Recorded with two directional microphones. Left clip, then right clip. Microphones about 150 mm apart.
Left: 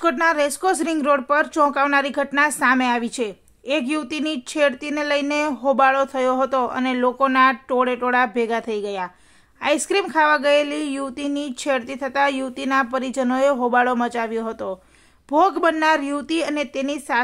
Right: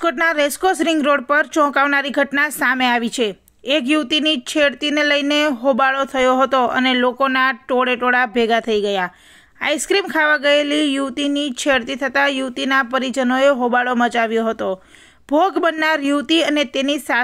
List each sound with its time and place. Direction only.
0.0 s speech: 15° right (ahead or behind)